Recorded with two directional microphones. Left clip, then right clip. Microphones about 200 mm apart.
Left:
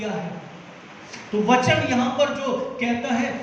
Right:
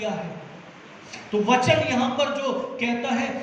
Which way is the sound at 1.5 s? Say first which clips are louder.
Left 1 dB; 40° right (ahead or behind).